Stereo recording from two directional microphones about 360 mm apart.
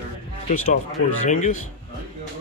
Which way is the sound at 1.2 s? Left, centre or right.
Left.